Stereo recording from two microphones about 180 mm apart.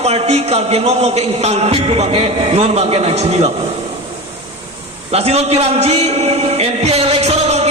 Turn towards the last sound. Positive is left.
turn(degrees=-35)  # may be behind; listen again after turning